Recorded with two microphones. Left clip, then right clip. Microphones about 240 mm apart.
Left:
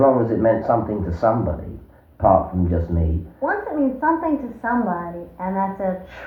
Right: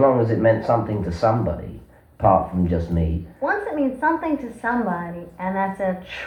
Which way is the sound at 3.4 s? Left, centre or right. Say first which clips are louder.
Left 1 dB; right.